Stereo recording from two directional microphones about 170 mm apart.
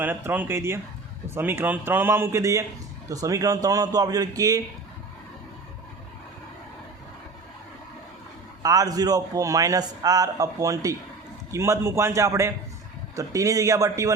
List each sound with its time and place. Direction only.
0.0 s a man's voice: 10° right (ahead or behind)
8.6 s a man's voice: 20° right (ahead or behind)